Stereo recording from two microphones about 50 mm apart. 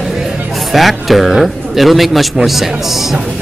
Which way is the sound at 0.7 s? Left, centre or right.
Centre.